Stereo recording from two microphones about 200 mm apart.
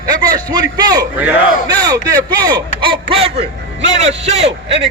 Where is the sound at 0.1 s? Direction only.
20° right (ahead or behind).